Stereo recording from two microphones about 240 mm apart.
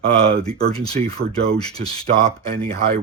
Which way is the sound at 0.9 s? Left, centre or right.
Right.